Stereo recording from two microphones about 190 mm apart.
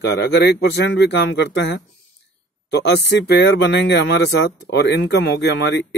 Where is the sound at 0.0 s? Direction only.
60° left (ahead or behind).